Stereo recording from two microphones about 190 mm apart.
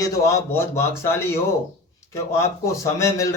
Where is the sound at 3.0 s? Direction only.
15° left (ahead or behind).